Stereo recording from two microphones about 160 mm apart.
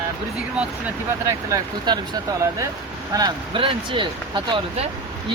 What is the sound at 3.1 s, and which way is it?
Speech, 25° right (ahead or behind).